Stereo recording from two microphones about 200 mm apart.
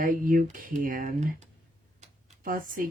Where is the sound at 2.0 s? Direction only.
45° right (ahead or behind).